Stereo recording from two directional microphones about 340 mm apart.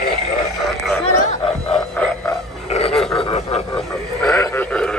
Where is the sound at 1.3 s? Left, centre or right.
Centre.